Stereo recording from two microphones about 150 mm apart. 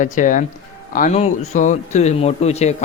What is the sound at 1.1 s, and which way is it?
Speech, 45° left (ahead or behind).